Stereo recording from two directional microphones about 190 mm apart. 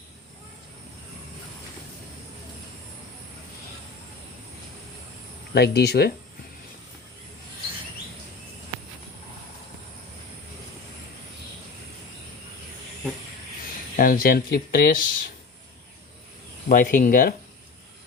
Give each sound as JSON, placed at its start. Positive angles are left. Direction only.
{"t": 5.5, "sound": "speech", "side_deg": 60}
{"t": 13.9, "sound": "speech", "side_deg": 50}
{"t": 16.6, "sound": "speech", "side_deg": 45}